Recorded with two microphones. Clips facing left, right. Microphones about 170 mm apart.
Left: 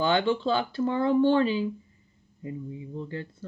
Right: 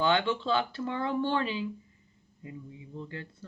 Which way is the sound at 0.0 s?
35° left (ahead or behind).